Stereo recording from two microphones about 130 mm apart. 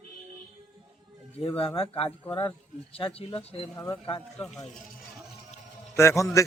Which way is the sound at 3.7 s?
20° left (ahead or behind).